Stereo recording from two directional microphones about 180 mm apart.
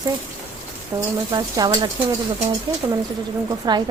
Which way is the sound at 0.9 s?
15° right (ahead or behind).